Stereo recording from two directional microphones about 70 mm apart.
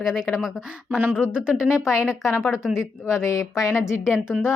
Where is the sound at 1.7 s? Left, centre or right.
Left.